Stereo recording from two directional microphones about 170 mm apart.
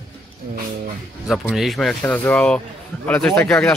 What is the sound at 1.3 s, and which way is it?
A man's voice, centre (ahead or behind).